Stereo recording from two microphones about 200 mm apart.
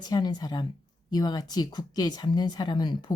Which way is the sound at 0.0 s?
20° left (ahead or behind).